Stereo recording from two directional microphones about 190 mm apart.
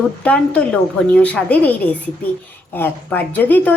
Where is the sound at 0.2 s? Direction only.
5° left (ahead or behind).